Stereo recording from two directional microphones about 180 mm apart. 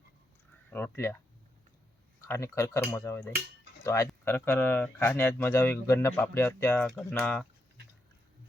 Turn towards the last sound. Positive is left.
turn(degrees=5)  # may be behind; listen again after turning